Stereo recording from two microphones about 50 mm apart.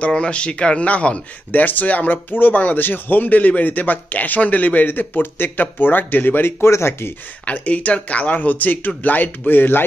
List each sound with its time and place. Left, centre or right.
0.1 s speech: left
1.5 s speech: left
6.6 s speech: left
7.5 s speech: left